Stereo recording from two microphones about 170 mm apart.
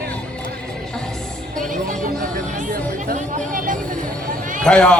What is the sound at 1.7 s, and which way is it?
Music, 55° right (ahead or behind).